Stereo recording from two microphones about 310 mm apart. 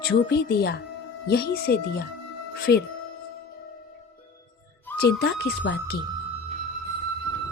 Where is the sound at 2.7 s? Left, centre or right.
Left.